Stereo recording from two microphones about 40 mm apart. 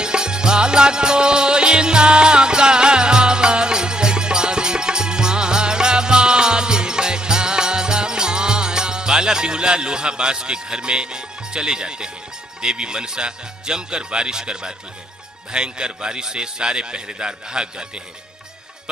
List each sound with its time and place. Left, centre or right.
0.0 s music: centre
12.7 s a man's voice: right